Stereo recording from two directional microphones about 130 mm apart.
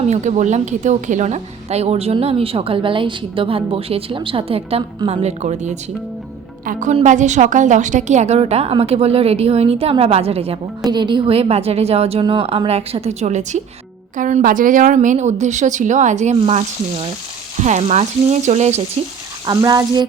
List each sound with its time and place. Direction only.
0.1 s a woman's voice: 60° right (ahead or behind)
6.7 s a woman's voice: 75° right (ahead or behind); by 10.6 s 50° right (ahead or behind)
10.8 s a woman's voice: 35° right (ahead or behind); by 13.6 s 65° right (ahead or behind)
14.2 s a woman's voice: 75° right (ahead or behind)
19.5 s speech: 30° right (ahead or behind)